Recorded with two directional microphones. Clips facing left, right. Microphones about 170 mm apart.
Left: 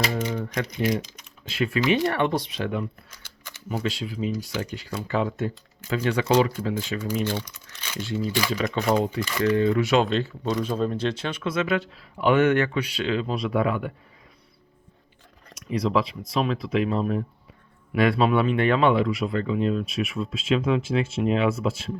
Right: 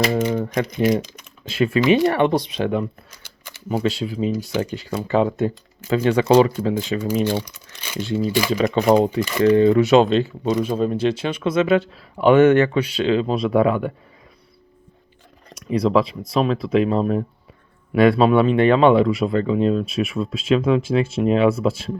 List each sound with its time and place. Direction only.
0.2 s typewriter: 55° right (ahead or behind)
0.4 s speech: 25° right (ahead or behind)
0.7 s speech: 55° right (ahead or behind)
1.0 s typing: 55° right (ahead or behind)
1.5 s speech: 25° right (ahead or behind)
3.1 s a sound: 15° right (ahead or behind)
3.8 s speech: 25° right (ahead or behind)
8.5 s speech: 30° right (ahead or behind)
8.8 s speech: 15° right (ahead or behind)
15.6 s speech: 30° right (ahead or behind)